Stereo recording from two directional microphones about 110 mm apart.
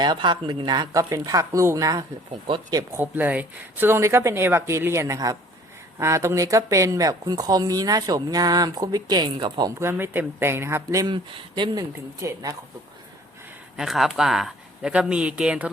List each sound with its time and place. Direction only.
0.0 s speech: 45° right (ahead or behind)
2.9 s speech: 15° right (ahead or behind); by 9.7 s 40° right (ahead or behind)
9.8 s speech: 20° right (ahead or behind)
11.0 s speech: 45° right (ahead or behind)
13.7 s speech: centre (ahead or behind)